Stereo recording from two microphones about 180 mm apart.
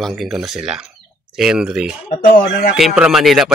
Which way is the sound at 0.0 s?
Centre (ahead or behind).